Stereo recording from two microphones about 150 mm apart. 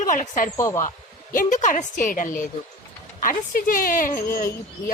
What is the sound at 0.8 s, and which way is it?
A woman's voice, 60° left (ahead or behind).